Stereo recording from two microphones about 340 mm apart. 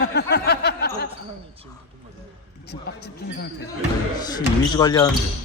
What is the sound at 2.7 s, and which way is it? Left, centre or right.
Speech, left.